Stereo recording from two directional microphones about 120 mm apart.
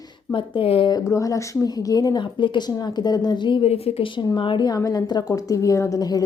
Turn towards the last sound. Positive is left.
turn(degrees=30)  # may be behind; listen again after turning